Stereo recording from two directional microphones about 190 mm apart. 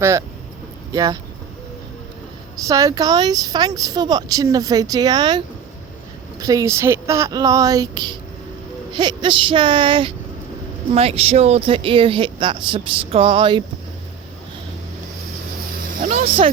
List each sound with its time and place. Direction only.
0.0 s speech: 15° right (ahead or behind)
2.6 s speech: 15° right (ahead or behind)
6.4 s speech: 15° right (ahead or behind)
16.0 s vehicle: 40° right (ahead or behind)